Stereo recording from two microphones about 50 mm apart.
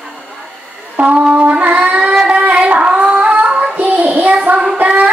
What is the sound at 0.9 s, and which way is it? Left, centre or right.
Music, right.